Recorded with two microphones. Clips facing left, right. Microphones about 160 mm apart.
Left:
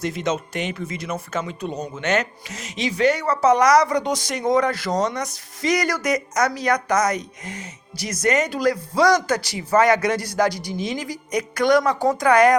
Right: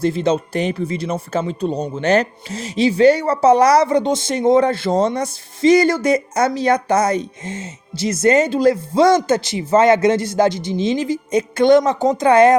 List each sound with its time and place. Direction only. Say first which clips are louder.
0.0 s speech: right 7 dB; 30° right (ahead or behind)